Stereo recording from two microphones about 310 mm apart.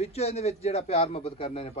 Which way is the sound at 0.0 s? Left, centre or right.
Centre.